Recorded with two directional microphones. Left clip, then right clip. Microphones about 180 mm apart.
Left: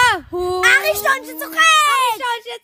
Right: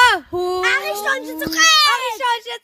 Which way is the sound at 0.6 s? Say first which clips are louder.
Left 7 dB; 85° left.